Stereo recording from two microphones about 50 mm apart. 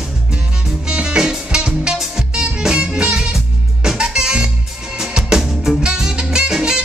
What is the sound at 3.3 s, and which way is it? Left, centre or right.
Music, centre.